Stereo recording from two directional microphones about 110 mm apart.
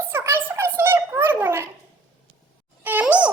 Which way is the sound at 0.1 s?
20° right (ahead or behind).